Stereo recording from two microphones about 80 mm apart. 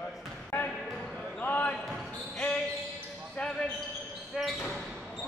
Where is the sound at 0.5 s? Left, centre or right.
Left.